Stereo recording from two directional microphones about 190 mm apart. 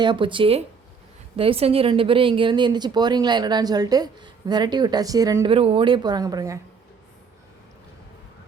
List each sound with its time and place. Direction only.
0.0 s speech: 25° right (ahead or behind)